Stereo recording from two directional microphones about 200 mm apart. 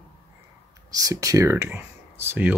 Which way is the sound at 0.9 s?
15° right (ahead or behind).